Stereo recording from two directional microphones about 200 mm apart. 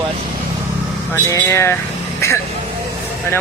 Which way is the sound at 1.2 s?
15° left (ahead or behind).